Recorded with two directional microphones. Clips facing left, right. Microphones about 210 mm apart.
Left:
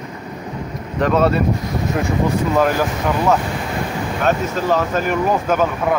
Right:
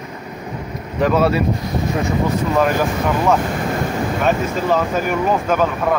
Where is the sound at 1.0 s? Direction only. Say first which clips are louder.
Even; 5° right (ahead or behind).